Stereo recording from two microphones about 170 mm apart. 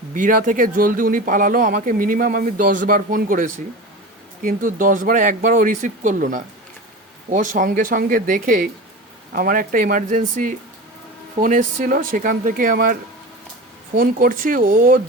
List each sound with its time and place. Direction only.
0.1 s speech: 55° right (ahead or behind)